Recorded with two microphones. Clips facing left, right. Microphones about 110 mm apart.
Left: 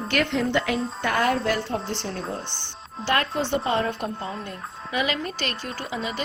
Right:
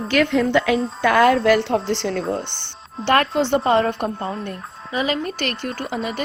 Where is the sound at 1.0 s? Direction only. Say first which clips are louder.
Right 8 dB; 90° right.